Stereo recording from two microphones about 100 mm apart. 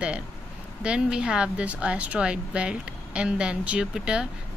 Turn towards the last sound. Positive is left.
turn(degrees=-5)  # may be behind; listen again after turning